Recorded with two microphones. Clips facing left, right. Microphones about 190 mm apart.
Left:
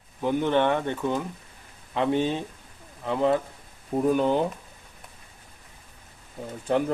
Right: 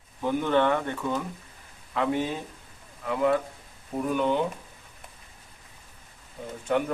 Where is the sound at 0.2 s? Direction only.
15° left (ahead or behind); by 4.4 s 35° left (ahead or behind).